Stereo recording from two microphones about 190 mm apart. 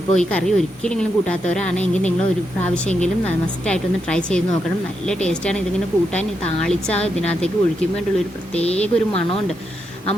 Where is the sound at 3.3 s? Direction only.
5° left (ahead or behind).